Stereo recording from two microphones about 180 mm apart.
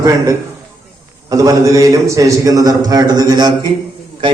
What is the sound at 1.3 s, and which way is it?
A man's voice, 20° right (ahead or behind).